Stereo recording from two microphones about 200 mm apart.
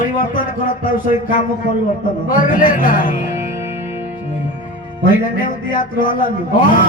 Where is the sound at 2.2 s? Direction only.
40° left (ahead or behind).